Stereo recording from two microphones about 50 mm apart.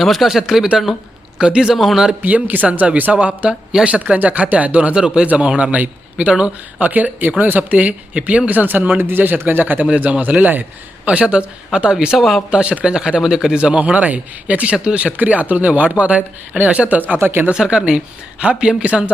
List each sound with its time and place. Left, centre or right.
0.0 s speech: centre
1.7 s speech: centre
2.2 s a man's voice: right
4.9 s a man's voice: centre; by 11.1 s right
11.1 s a man's voice: right
17.2 s speech: right
17.5 s a man's voice: centre